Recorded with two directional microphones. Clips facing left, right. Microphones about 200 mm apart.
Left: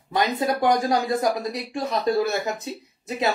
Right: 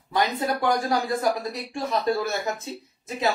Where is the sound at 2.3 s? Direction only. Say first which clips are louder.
Left 2 dB; 15° left (ahead or behind).